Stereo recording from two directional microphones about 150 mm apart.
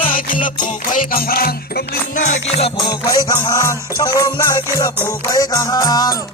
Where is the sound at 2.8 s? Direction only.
25° left (ahead or behind).